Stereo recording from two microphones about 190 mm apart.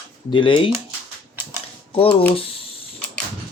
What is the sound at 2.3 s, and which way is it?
Speech, 30° left (ahead or behind).